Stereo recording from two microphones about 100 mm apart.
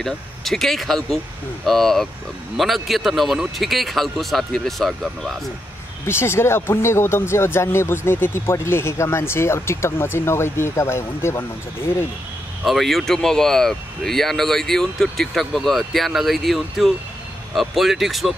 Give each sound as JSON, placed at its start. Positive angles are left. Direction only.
{"t": 0.0, "sound": "speech", "side_deg": 0}
{"t": 6.0, "sound": "speech", "side_deg": 25}
{"t": 12.6, "sound": "speech", "side_deg": 0}